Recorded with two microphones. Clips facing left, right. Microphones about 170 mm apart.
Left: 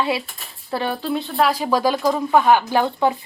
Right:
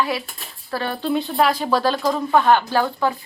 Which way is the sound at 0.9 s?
Centre (ahead or behind).